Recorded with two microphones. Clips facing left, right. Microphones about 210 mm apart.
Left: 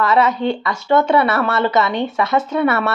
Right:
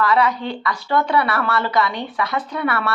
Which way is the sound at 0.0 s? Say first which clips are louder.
Left 3 dB; 25° left (ahead or behind).